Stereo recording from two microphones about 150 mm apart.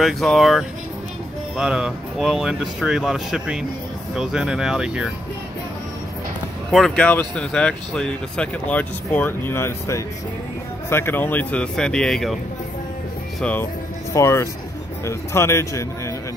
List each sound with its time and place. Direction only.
0.0 s speech: centre (ahead or behind)
6.7 s speech: 5° left (ahead or behind)
13.4 s speech: 10° left (ahead or behind)